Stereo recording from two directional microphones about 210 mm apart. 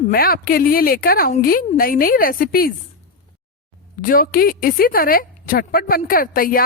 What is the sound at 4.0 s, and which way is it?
A woman's voice, 40° left (ahead or behind).